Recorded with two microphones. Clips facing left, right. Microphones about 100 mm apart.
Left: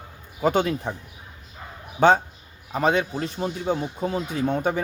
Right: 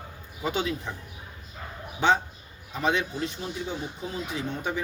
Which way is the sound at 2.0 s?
50° left (ahead or behind).